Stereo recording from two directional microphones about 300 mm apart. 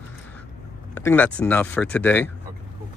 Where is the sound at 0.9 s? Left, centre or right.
Centre.